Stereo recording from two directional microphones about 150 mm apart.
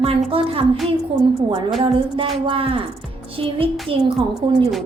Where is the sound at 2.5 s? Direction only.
35° right (ahead or behind).